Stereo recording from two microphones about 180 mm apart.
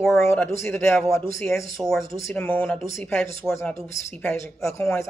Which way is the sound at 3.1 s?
15° left (ahead or behind).